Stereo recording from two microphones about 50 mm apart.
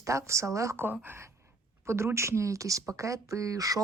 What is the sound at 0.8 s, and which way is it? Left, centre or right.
Speech, right.